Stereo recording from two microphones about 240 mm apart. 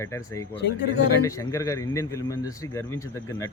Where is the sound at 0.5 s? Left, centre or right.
Left.